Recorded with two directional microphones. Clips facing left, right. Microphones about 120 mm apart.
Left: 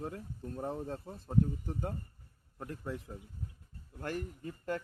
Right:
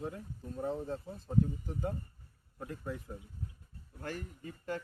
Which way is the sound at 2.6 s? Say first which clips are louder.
Even; 55° left (ahead or behind).